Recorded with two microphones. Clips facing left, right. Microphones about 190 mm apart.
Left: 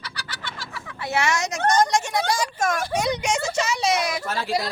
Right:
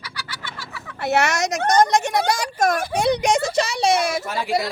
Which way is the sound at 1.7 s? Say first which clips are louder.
Right 5 dB; 60° right (ahead or behind).